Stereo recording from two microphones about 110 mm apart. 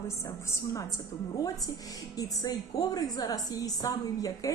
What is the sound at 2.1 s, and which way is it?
A woman's voice, 35° left (ahead or behind).